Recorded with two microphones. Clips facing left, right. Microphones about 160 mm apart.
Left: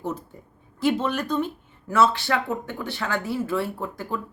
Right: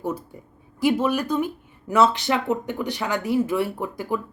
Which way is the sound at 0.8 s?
10° right (ahead or behind).